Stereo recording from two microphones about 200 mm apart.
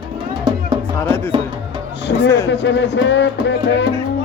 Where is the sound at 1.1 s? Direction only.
10° left (ahead or behind).